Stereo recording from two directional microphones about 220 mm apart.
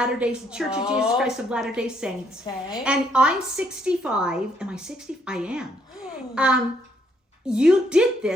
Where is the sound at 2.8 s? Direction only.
5° right (ahead or behind).